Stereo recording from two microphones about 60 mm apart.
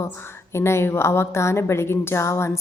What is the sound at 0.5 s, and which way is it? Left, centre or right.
A woman's voice, left.